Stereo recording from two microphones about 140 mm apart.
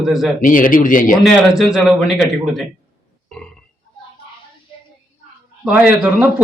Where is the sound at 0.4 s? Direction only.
80° left.